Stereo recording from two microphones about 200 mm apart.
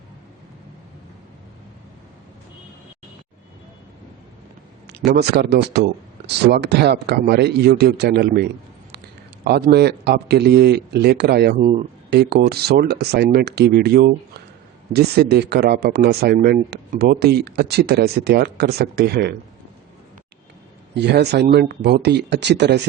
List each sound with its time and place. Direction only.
4.9 s speech: 55° right (ahead or behind)
11.6 s speech: 35° right (ahead or behind)
12.1 s speech: 55° right (ahead or behind)
20.9 s speech: 60° right (ahead or behind)